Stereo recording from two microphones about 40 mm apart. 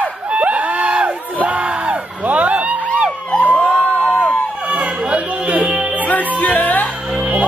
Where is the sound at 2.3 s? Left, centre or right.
Right.